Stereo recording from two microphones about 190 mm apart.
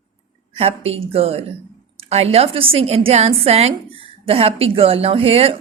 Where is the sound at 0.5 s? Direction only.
30° right (ahead or behind).